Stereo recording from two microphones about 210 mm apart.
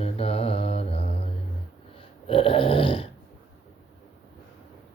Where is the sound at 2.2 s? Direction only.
25° left (ahead or behind).